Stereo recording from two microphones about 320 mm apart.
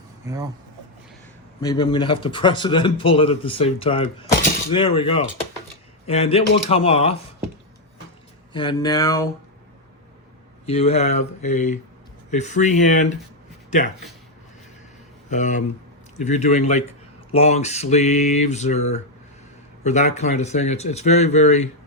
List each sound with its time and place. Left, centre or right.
0.2 s speech: centre
1.6 s speech: centre
8.5 s speech: centre
10.7 s speech: centre
15.3 s speech: left